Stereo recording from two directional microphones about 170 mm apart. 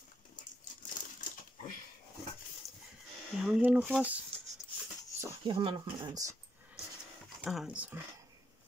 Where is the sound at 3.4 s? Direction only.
5° right (ahead or behind).